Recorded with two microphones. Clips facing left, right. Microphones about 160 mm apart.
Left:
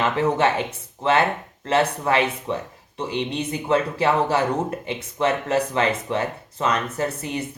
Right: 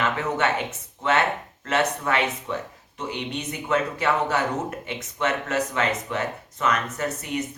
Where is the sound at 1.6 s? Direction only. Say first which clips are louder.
Left 3 dB; 30° left (ahead or behind).